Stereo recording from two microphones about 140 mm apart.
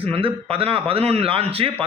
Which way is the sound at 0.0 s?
40° right (ahead or behind).